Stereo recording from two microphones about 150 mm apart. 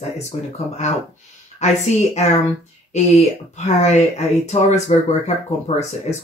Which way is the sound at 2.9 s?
50° left (ahead or behind).